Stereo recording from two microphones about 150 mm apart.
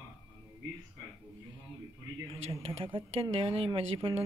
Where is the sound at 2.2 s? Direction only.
35° right (ahead or behind).